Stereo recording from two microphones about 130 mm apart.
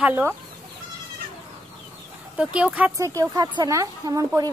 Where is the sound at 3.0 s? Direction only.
25° right (ahead or behind).